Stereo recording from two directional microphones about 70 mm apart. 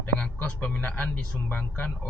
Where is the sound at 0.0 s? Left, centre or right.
Centre.